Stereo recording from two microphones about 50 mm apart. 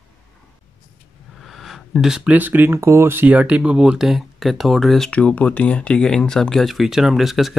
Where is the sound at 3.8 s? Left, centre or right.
Centre.